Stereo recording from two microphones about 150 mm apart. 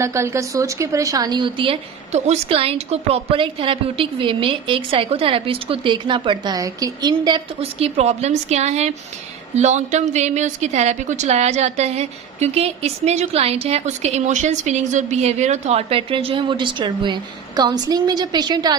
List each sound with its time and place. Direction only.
0.0 s a woman's voice: 20° right (ahead or behind)
7.6 s a woman's voice: 45° right (ahead or behind); by 18.8 s 30° right (ahead or behind)